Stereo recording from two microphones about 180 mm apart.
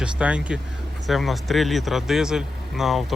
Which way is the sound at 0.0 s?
5° right (ahead or behind).